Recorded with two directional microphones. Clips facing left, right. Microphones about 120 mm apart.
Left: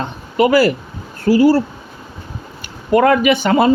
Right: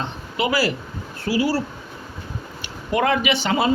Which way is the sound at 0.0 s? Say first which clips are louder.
Left 9 dB; 50° left (ahead or behind).